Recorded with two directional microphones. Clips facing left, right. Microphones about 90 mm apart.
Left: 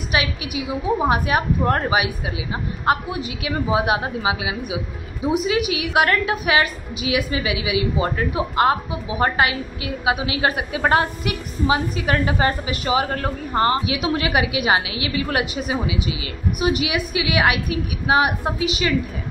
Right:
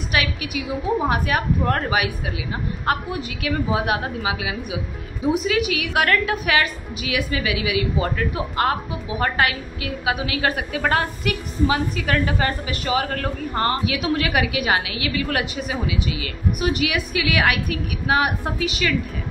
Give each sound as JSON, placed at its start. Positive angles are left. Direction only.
{"t": 0.1, "sound": "a woman's voice", "side_deg": 15}